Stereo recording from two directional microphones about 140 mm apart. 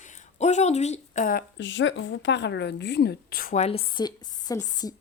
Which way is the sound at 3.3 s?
90° left.